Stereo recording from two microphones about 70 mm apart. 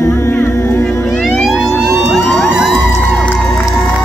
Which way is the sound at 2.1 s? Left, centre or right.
Centre.